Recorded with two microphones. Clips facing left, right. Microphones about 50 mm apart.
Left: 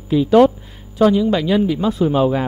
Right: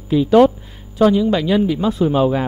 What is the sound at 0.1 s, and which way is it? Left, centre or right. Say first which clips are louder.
Speech: even; centre.